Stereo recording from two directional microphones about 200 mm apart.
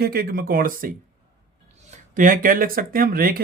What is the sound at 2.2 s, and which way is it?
Speech, 45° right (ahead or behind).